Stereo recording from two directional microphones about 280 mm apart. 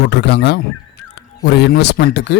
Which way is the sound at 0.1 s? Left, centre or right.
Left.